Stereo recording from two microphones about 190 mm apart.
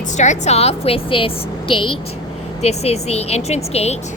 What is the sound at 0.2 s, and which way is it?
Speech, 35° left (ahead or behind).